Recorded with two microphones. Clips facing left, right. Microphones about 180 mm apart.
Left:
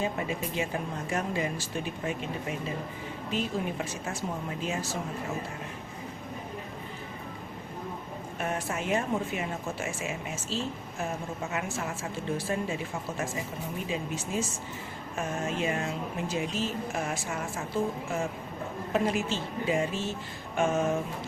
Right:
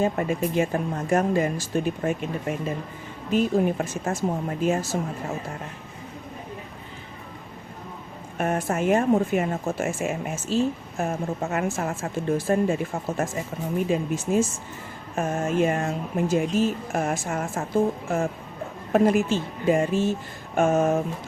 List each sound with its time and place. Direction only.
0.0 s speech: 50° right (ahead or behind)
8.4 s speech: 50° right (ahead or behind)
18.9 s speech: 50° right (ahead or behind)